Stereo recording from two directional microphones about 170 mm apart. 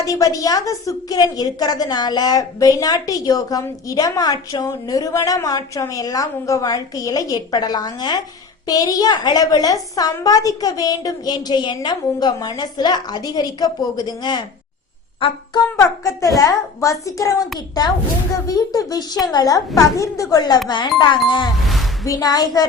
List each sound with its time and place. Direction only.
0.0 s a woman's voice: 20° left (ahead or behind)
15.7 s a woman's voice: 15° left (ahead or behind)